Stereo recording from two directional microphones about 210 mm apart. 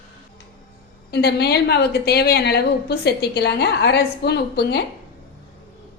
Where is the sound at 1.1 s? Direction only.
50° left (ahead or behind).